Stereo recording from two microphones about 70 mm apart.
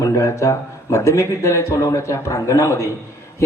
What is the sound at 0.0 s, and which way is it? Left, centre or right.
A man's voice, left.